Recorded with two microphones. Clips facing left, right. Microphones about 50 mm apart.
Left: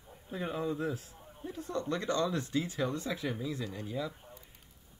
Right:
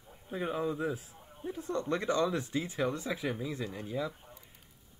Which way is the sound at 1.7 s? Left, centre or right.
Right.